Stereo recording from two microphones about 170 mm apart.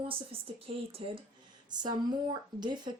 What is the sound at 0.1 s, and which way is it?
Speech, 35° right (ahead or behind).